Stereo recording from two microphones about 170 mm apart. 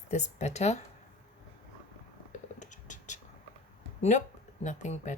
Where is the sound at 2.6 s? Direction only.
45° left (ahead or behind).